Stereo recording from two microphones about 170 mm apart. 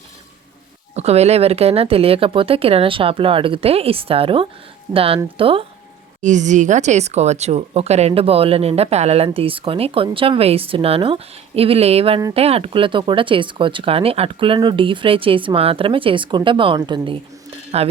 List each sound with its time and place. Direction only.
0.9 s speech: 40° right (ahead or behind)
6.2 s speech: 45° right (ahead or behind); by 17.2 s 25° right (ahead or behind)
17.7 s speech: 35° right (ahead or behind)